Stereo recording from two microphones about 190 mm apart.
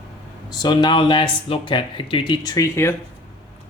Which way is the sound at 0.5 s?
20° left (ahead or behind).